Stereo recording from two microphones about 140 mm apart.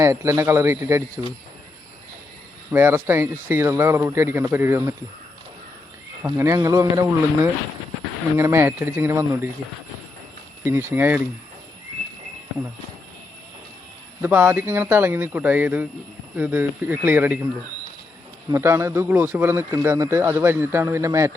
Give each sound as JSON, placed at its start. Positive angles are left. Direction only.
{"t": 0.0, "sound": "a man's voice", "side_deg": -20}
{"t": 2.7, "sound": "a man's voice", "side_deg": -15}
{"t": 6.2, "sound": "a man's voice", "side_deg": -20}
{"t": 10.6, "sound": "speech", "side_deg": -20}
{"t": 14.2, "sound": "speech", "side_deg": -15}
{"t": 18.5, "sound": "a man's voice", "side_deg": -20}